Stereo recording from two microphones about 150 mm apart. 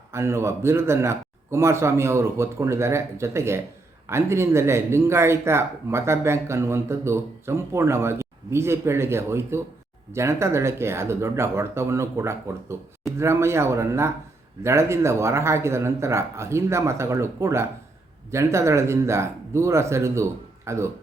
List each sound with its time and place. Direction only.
0.1 s speech: 15° right (ahead or behind)